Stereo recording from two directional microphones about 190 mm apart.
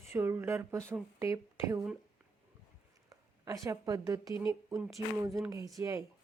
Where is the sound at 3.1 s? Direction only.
20° right (ahead or behind).